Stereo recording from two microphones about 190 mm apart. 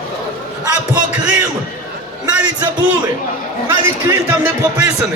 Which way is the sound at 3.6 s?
15° right (ahead or behind).